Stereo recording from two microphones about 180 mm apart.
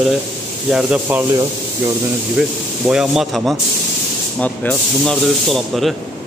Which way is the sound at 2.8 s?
5° right (ahead or behind).